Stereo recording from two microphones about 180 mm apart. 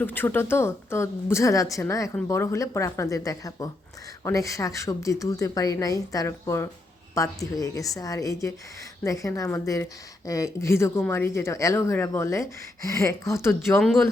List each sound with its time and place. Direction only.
0.0 s a woman's voice: 10° left (ahead or behind)